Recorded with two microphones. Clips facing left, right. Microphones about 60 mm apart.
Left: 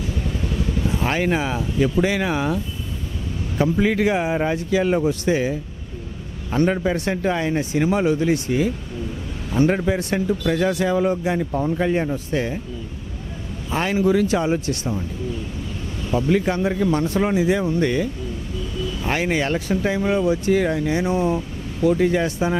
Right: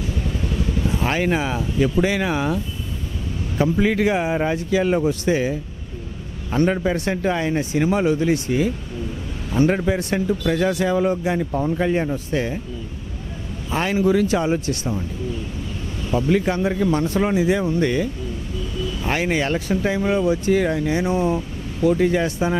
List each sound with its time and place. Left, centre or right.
0.8 s speech: right
13.7 s speech: right
16.1 s speech: right